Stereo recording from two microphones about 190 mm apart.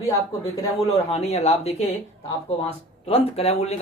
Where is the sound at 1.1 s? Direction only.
35° left (ahead or behind).